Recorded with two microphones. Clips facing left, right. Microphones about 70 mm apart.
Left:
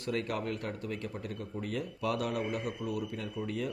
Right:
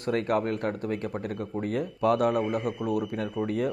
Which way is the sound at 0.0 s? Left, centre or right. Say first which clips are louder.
Right 8 dB; right.